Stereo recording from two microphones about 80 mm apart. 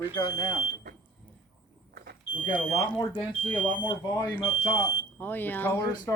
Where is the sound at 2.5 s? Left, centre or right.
Centre.